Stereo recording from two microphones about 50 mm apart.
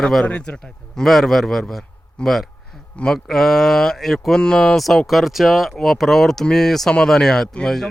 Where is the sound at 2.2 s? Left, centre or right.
Centre.